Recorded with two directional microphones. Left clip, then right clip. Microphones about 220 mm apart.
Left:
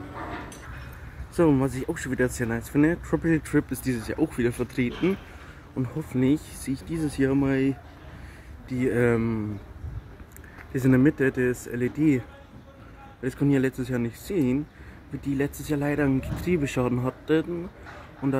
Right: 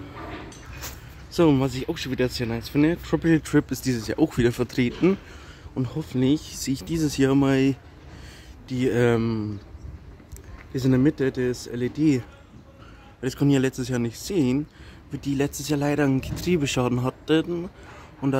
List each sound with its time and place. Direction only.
1.4 s speech: 20° right (ahead or behind)
6.1 s speech: 15° right (ahead or behind)
10.7 s speech: 10° right (ahead or behind)
13.2 s speech: 20° right (ahead or behind)